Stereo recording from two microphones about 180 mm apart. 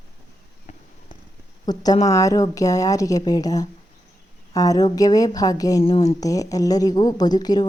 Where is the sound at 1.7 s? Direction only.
25° left (ahead or behind).